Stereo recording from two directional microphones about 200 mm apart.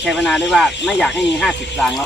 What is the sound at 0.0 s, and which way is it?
Speech, centre (ahead or behind).